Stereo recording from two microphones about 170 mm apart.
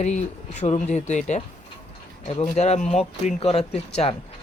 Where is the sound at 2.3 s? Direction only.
40° left (ahead or behind).